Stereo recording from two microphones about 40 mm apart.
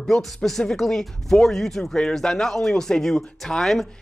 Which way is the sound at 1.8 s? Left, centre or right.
Left.